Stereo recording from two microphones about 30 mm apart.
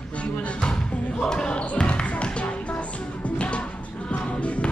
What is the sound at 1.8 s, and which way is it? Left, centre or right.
Basketball bounce, left.